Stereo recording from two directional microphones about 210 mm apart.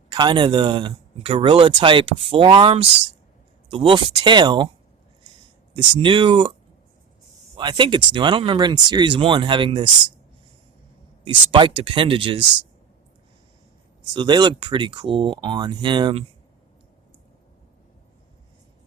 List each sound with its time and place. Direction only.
0.1 s speech: 20° right (ahead or behind)
5.7 s speech: 25° right (ahead or behind)
7.5 s speech: 20° right (ahead or behind)
11.5 s speech: 25° right (ahead or behind)
14.1 s speech: 20° right (ahead or behind)